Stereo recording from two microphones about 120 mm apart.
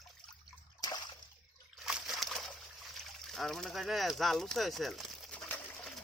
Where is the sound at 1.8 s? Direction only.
Centre (ahead or behind).